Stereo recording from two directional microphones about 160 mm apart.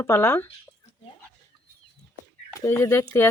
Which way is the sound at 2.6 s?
15° left (ahead or behind).